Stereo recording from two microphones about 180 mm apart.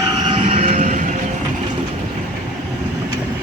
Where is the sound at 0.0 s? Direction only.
25° right (ahead or behind); by 1.1 s 40° right (ahead or behind).